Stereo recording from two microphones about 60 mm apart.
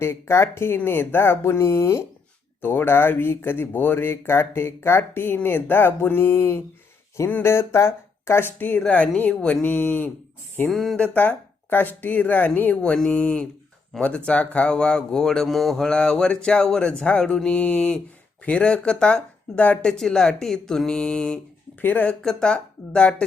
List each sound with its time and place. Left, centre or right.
0.0 s speech: left
2.6 s speech: left
9.3 s speech: centre
9.6 s speech: left
10.7 s mantra: centre
10.9 s speech: left
13.9 s mantra: centre
14.3 s speech: centre
15.4 s mantra: centre
15.8 s speech: centre
17.6 s speech: left
19.8 s speech: centre
21.8 s speech: left
22.2 s speech: centre